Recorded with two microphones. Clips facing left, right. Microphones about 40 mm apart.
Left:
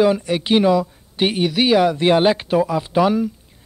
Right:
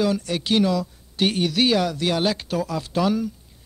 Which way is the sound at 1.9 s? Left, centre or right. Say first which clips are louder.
Left 8 dB; left.